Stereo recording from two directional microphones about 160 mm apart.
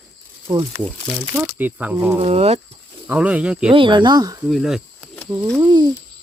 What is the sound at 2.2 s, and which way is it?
Speech, 40° right (ahead or behind).